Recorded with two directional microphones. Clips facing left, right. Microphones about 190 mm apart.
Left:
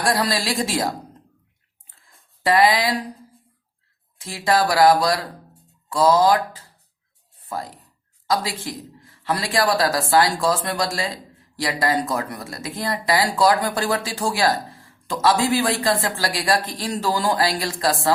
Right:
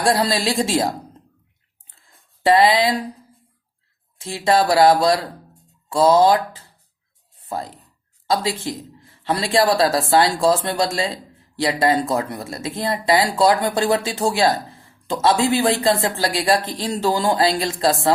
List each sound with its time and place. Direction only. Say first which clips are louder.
0.0 s a man's voice: right 3 dB; 25° right (ahead or behind)
2.4 s a man's voice: right 3 dB; 25° right (ahead or behind)
4.2 s a man's voice: right 2 dB; 25° right (ahead or behind)